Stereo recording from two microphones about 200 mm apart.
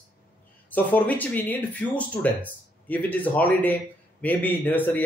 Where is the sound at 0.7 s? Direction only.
10° left (ahead or behind).